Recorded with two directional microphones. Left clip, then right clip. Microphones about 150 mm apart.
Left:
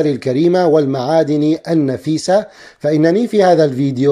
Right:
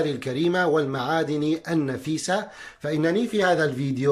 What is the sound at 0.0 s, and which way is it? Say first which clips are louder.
Speech: left 10 dB; 40° left (ahead or behind).